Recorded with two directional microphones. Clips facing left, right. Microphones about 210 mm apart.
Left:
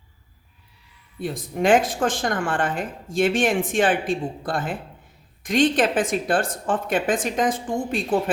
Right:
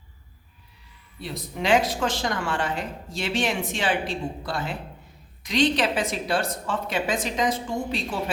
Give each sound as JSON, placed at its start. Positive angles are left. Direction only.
{"t": 1.2, "sound": "speech", "side_deg": 50}